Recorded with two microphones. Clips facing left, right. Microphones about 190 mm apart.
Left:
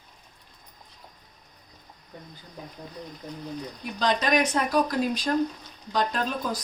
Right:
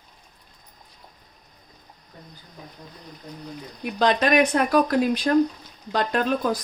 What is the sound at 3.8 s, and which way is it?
Speech, 60° right (ahead or behind).